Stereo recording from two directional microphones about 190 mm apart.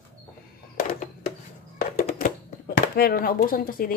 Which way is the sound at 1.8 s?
45° left (ahead or behind).